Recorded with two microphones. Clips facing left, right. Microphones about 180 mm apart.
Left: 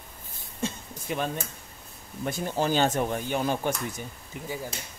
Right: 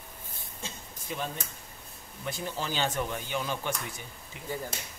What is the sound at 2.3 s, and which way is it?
Speech, 50° left (ahead or behind).